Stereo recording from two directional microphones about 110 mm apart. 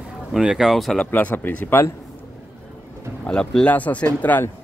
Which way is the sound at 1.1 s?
15° left (ahead or behind).